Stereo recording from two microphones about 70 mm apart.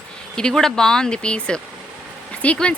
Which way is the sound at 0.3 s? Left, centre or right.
Centre.